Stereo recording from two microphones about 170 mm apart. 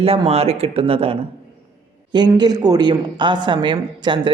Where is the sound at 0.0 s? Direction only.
35° right (ahead or behind).